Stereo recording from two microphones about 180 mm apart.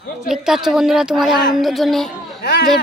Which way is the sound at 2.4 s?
65° left (ahead or behind).